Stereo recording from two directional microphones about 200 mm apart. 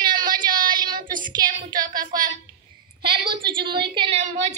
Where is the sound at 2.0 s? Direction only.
45° right (ahead or behind).